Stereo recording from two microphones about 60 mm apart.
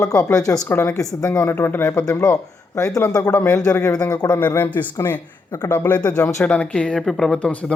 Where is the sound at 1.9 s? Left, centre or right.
Left.